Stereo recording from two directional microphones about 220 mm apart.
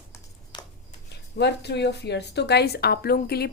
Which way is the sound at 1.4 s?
50° left (ahead or behind).